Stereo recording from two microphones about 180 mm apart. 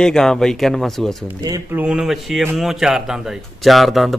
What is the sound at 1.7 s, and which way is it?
A man's voice, 5° right (ahead or behind).